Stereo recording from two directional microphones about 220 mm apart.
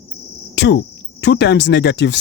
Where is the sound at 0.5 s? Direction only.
50° left (ahead or behind).